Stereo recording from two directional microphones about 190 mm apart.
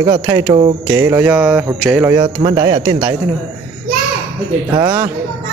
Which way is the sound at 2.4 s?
25° right (ahead or behind).